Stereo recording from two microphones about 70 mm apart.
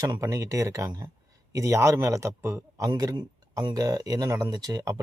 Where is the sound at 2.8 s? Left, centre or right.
Right.